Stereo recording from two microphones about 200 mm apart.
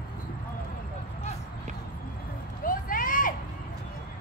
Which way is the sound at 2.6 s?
45° left (ahead or behind).